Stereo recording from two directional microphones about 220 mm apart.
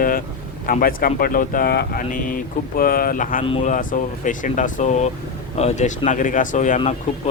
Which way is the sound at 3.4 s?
30° left (ahead or behind).